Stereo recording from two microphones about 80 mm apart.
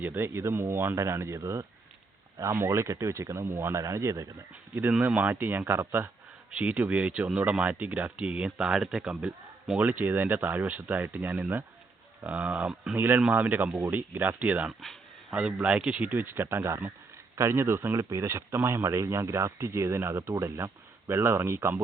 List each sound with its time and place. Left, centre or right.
0.0 s speech: right
4.8 s speech: centre
6.6 s speech: centre
9.7 s speech: right
13.0 s speech: right
14.7 s speech: centre
15.3 s speech: centre; by 21.8 s right